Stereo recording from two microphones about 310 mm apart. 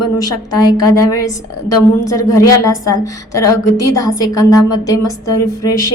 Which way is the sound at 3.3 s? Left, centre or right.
Left.